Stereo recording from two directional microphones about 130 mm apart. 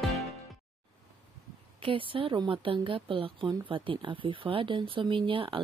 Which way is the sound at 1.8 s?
40° right (ahead or behind).